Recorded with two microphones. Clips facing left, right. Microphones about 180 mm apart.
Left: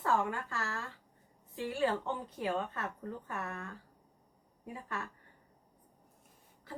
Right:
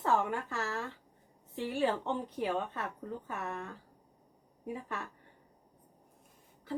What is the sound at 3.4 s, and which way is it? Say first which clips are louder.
Speech: right 3 dB; 20° right (ahead or behind).